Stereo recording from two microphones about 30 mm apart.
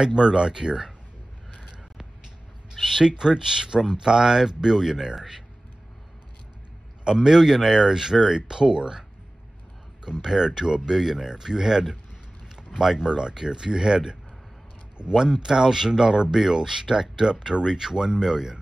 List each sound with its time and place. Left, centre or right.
0.0 s speech: right
2.7 s speech: centre
7.1 s speech: centre
10.2 s speech: centre
15.1 s speech: centre